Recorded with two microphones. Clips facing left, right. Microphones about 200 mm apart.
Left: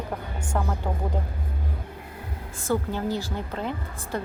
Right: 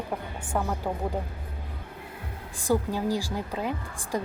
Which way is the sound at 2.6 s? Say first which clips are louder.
Right 1 dB; 15° right (ahead or behind).